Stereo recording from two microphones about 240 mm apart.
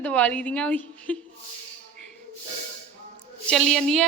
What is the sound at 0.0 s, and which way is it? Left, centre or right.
A woman's voice, centre.